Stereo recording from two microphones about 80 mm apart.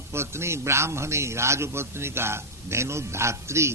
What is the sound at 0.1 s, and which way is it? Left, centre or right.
A man's voice, right.